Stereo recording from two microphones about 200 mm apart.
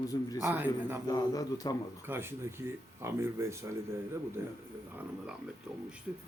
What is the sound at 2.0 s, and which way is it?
Speech, 10° right (ahead or behind).